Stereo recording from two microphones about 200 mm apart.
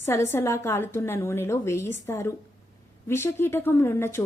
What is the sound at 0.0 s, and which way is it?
A woman's voice, 15° left (ahead or behind).